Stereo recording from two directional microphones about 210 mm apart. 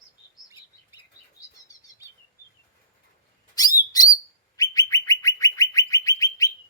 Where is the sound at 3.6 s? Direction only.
15° left (ahead or behind).